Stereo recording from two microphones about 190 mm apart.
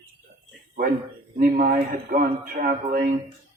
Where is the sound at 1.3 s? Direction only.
45° right (ahead or behind).